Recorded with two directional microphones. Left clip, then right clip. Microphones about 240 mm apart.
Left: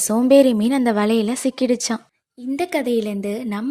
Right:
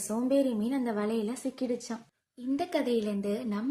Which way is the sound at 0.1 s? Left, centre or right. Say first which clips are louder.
Left 14 dB; left.